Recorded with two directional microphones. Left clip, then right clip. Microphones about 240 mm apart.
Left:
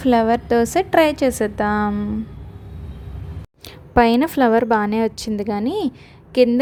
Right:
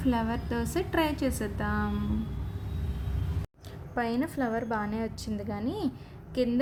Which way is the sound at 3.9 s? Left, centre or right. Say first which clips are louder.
Left 16 dB; left.